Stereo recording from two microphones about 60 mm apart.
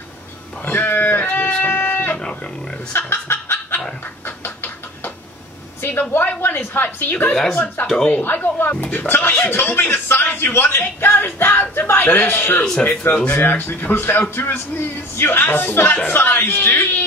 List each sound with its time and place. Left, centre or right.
0.7 s a sound: left
5.8 s a woman's voice: left
13.1 s speech: centre
13.4 s speech: left